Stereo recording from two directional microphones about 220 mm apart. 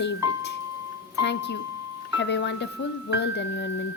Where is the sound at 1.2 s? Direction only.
50° left (ahead or behind).